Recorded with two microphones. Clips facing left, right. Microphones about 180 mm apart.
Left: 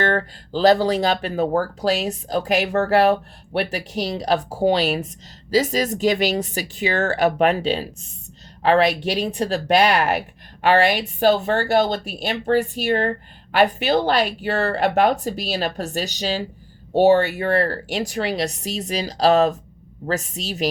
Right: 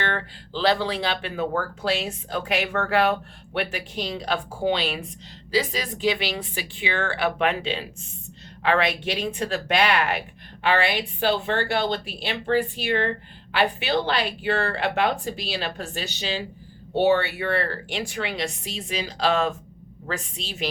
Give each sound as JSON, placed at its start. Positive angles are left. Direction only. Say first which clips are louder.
{"t": 0.0, "sound": "a woman's voice", "louder": "left 7 dB", "side_deg": 40}